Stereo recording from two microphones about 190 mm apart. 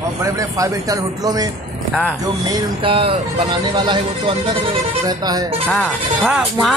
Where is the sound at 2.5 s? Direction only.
30° right (ahead or behind).